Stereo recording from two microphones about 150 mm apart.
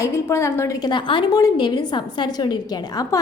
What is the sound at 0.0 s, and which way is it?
A woman's voice, 20° left (ahead or behind).